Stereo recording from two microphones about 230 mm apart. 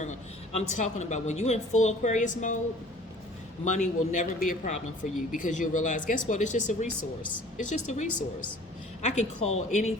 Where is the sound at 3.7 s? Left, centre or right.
Left.